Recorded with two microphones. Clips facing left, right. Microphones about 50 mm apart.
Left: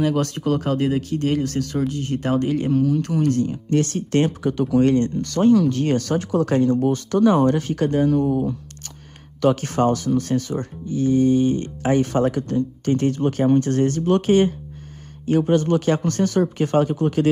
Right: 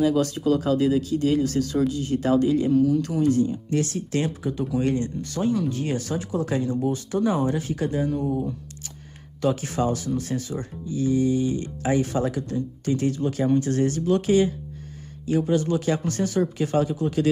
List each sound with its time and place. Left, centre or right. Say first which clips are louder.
0.0 s speech: even; left
9.4 s speech: left 5 dB; left